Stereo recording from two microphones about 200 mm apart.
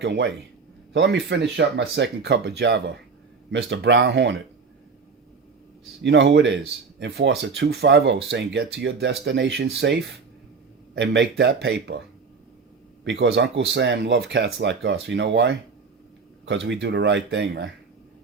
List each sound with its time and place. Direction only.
0.0 s speech: 60° right (ahead or behind)
6.0 s speech: 60° right (ahead or behind)
13.1 s speech: 60° right (ahead or behind)